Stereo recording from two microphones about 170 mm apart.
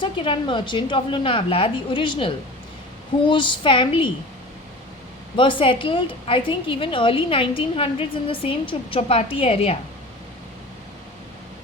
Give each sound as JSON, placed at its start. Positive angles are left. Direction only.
{"t": 0.0, "sound": "a woman's voice", "side_deg": 30}
{"t": 5.4, "sound": "a woman's voice", "side_deg": 30}